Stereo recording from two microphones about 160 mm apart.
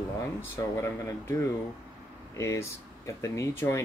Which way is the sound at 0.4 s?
15° left (ahead or behind).